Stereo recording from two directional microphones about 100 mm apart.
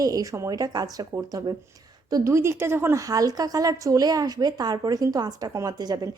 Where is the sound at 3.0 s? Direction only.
35° right (ahead or behind).